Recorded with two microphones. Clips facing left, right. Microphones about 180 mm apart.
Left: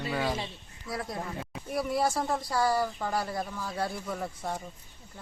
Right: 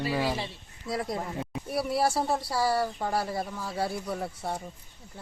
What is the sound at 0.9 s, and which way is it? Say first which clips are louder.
Speech: right 4 dB; 25° right (ahead or behind).